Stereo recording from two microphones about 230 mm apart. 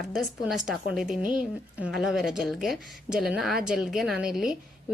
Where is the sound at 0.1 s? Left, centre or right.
Centre.